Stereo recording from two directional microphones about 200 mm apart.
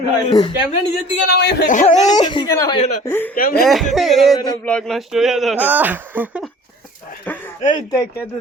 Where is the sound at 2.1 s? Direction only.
20° left (ahead or behind).